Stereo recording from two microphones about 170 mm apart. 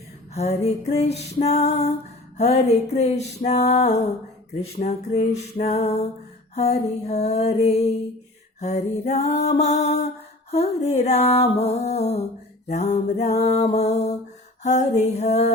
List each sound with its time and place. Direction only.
0.3 s music: 40° left (ahead or behind)